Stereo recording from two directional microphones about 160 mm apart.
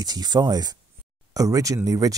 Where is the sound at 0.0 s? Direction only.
25° right (ahead or behind).